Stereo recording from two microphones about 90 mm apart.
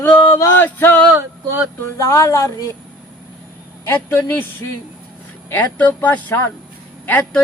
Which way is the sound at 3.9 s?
25° left (ahead or behind).